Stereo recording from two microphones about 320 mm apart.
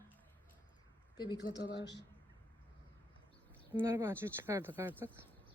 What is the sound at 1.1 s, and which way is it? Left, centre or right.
Speech, centre.